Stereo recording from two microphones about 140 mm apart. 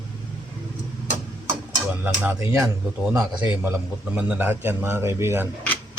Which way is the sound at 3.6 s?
15° right (ahead or behind).